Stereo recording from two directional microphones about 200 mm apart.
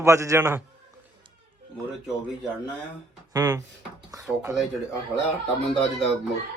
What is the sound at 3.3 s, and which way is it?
Speech, 15° right (ahead or behind).